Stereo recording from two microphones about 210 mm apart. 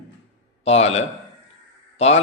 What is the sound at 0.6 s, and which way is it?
Speech, 30° left (ahead or behind).